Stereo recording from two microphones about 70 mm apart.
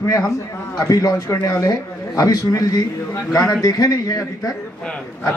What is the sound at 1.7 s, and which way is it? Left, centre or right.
A man's voice, left.